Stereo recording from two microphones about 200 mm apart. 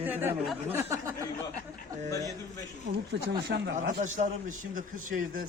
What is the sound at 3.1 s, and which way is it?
Speech, 55° right (ahead or behind).